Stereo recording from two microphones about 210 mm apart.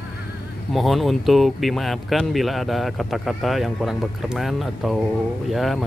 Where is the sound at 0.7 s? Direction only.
Centre (ahead or behind).